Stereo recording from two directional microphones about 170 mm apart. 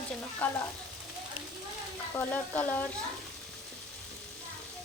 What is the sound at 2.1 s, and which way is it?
Speech, 10° left (ahead or behind).